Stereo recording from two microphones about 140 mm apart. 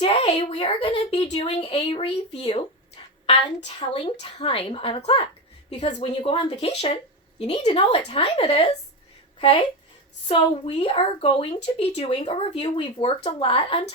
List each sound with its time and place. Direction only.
0.0 s a woman's voice: 40° left (ahead or behind)
3.8 s a woman's voice: 45° left (ahead or behind)
10.2 s a woman's voice: 40° left (ahead or behind)